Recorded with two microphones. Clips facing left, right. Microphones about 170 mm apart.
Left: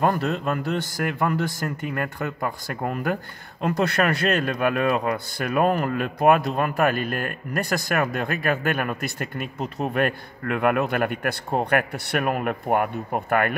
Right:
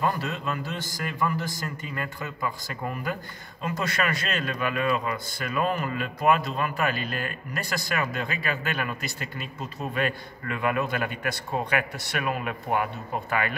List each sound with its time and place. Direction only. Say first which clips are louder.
0.0 s a man's voice: left 5 dB; 55° left (ahead or behind)